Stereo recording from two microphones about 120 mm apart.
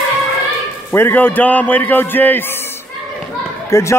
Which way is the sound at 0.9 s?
15° left (ahead or behind).